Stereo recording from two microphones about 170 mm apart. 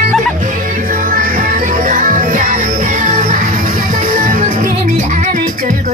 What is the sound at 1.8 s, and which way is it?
Music, 50° right (ahead or behind).